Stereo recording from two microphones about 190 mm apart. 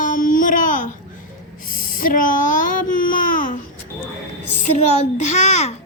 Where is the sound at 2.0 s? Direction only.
45° left (ahead or behind).